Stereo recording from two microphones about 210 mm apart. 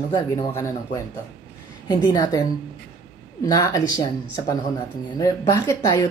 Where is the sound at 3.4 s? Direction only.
15° left (ahead or behind).